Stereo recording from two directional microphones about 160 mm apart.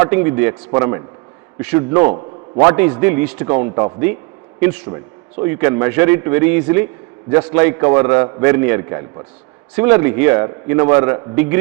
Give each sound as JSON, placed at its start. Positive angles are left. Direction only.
{"t": 0.0, "sound": "a man's voice", "side_deg": -15}
{"t": 5.4, "sound": "a man's voice", "side_deg": -15}